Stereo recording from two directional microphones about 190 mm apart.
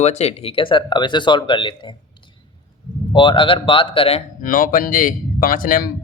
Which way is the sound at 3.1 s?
25° left (ahead or behind).